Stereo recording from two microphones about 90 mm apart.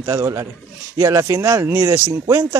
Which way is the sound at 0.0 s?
35° right (ahead or behind).